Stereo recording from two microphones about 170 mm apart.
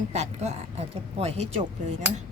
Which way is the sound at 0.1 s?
40° right (ahead or behind).